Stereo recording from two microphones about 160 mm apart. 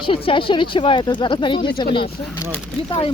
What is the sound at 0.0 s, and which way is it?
Speech, 35° left (ahead or behind).